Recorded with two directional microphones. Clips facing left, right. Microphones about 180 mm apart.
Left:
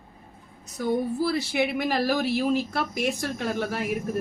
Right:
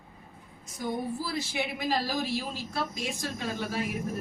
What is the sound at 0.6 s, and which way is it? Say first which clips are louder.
A woman's voice: left 7 dB; 65° left (ahead or behind).